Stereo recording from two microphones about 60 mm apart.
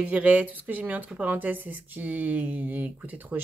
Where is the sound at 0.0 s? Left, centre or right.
Right.